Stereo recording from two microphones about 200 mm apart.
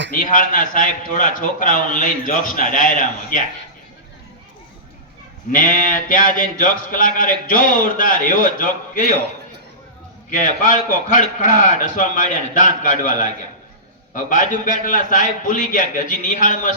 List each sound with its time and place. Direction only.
0.2 s speech: 40° left (ahead or behind)
5.5 s speech: 40° left (ahead or behind)
10.2 s speech: 40° left (ahead or behind)